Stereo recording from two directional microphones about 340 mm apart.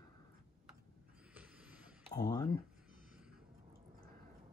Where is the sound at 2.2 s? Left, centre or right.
Centre.